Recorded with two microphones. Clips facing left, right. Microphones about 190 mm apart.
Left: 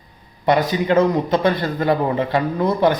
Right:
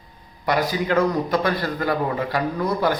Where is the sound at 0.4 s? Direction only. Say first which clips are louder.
Left 5 dB; 25° left (ahead or behind).